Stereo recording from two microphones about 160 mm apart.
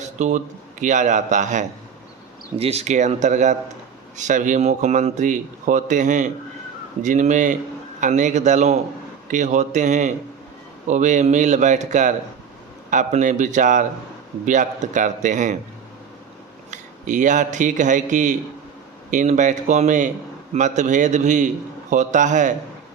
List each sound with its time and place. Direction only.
0.0 s a man's voice: 50° right (ahead or behind)
16.7 s a man's voice: 50° right (ahead or behind)